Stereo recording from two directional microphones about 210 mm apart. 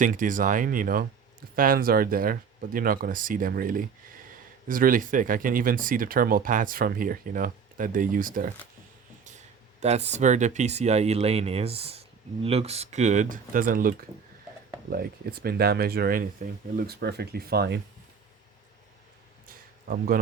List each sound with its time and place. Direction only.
0.0 s speech: 40° right (ahead or behind)
9.8 s speech: 30° right (ahead or behind); by 17.7 s 50° right (ahead or behind)
19.5 s a sound: 45° right (ahead or behind)